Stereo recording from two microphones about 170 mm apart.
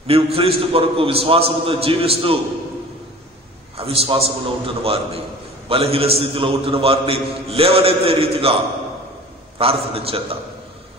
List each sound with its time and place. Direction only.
0.0 s a man's voice: 35° right (ahead or behind)
3.7 s a man's voice: 35° right (ahead or behind)
9.6 s a man's voice: 35° right (ahead or behind)